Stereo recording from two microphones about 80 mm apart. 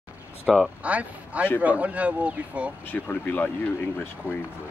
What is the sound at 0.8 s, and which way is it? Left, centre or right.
Speech, centre.